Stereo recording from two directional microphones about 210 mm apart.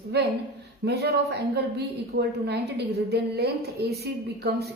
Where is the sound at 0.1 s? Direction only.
55° right (ahead or behind).